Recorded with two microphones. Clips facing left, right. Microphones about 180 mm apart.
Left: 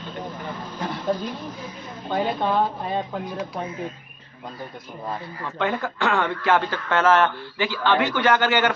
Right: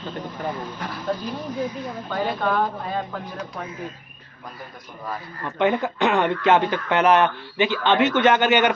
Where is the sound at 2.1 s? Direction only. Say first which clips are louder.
Left 1 dB; 25° left (ahead or behind).